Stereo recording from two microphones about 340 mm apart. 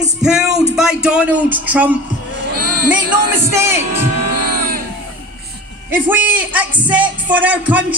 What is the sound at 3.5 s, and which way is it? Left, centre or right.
Speech, centre.